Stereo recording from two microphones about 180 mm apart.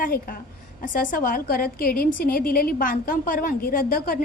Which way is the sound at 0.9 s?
50° left (ahead or behind).